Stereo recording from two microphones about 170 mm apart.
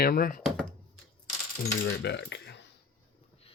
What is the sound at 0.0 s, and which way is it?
Speech, 60° left (ahead or behind).